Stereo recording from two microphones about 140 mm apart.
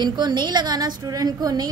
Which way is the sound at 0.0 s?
30° right (ahead or behind).